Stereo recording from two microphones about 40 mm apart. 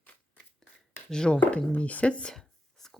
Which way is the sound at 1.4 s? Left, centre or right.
Left.